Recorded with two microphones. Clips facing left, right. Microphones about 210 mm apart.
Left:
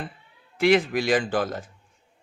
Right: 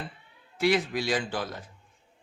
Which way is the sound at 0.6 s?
55° left (ahead or behind).